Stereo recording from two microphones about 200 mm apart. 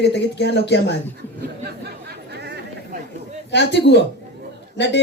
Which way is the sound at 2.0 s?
55° right (ahead or behind).